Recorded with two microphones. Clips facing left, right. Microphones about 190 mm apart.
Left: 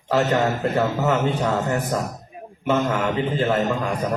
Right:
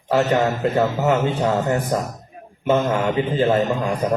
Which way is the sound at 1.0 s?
30° right (ahead or behind).